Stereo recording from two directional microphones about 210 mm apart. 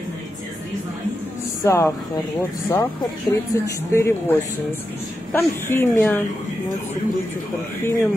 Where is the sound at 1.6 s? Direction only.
15° left (ahead or behind).